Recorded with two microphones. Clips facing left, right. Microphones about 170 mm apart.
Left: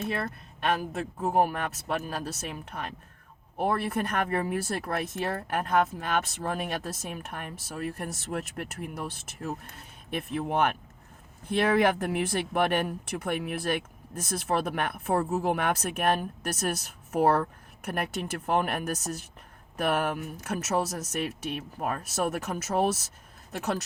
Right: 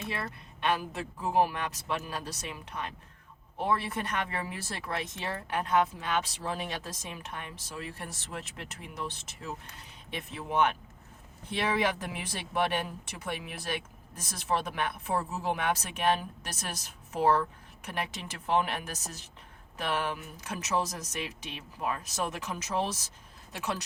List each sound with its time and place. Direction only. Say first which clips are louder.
0.0 s speech: left 5 dB; 50° left (ahead or behind)